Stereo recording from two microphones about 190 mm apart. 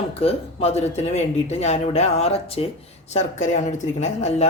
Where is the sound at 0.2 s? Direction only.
30° left (ahead or behind).